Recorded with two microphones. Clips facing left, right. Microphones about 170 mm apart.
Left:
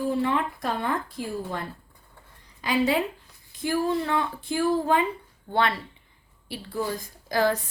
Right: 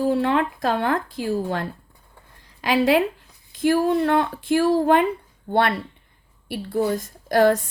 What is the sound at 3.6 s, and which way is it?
Speech, 70° right (ahead or behind).